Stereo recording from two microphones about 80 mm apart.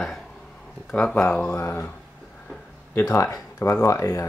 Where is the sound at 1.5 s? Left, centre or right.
Left.